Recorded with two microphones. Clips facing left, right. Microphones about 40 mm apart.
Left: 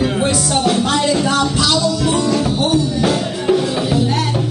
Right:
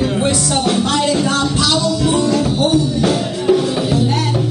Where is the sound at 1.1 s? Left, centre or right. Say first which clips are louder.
Even; centre.